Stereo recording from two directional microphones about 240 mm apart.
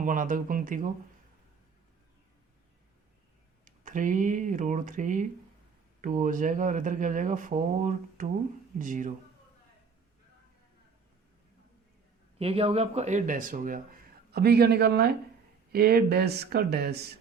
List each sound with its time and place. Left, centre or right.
0.0 s speech: right
3.8 s speech: right
12.4 s speech: right